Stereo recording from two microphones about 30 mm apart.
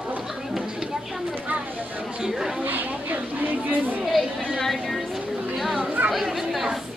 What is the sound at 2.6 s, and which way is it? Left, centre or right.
Chatter, right.